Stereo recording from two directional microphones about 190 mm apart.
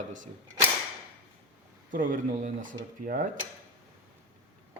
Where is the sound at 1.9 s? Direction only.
45° right (ahead or behind).